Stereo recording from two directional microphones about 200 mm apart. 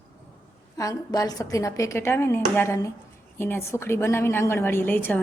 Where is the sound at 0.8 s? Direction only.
15° left (ahead or behind).